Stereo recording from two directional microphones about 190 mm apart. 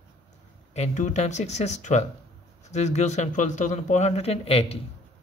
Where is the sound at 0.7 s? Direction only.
40° left (ahead or behind).